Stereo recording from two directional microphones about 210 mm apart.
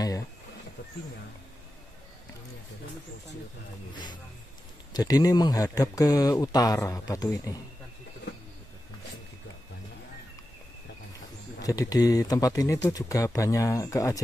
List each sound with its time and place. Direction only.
3.9 s speech: 20° left (ahead or behind)
11.6 s speech: 15° left (ahead or behind)